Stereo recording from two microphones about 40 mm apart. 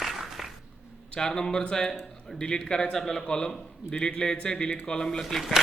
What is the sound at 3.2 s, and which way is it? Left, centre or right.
Speech, left.